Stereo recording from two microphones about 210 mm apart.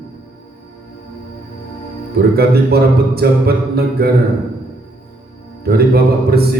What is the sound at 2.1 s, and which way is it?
A man's voice, 50° right (ahead or behind).